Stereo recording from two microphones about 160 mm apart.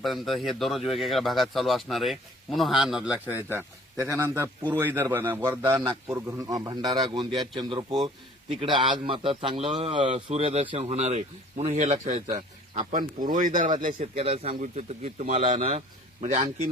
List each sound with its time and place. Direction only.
0.0 s a man's voice: centre (ahead or behind); by 13.6 s 55° right (ahead or behind)
13.8 s a man's voice: 40° right (ahead or behind)